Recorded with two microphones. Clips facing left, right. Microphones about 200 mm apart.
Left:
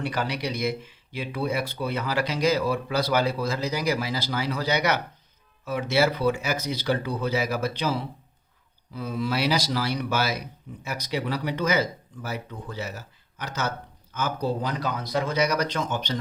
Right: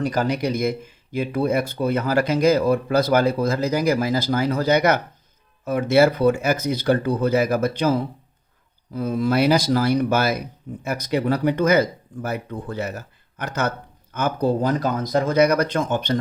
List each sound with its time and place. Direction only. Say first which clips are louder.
0.0 s speech: right 7 dB; 45° right (ahead or behind)